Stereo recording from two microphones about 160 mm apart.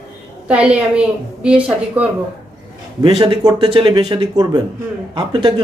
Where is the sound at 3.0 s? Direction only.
30° right (ahead or behind).